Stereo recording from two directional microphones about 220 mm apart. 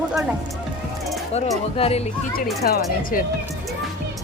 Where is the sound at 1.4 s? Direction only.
25° left (ahead or behind).